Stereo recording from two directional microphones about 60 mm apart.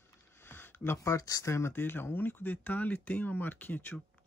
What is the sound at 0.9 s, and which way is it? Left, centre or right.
Speech, left.